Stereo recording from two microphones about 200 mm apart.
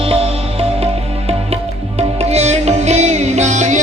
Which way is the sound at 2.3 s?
30° right (ahead or behind).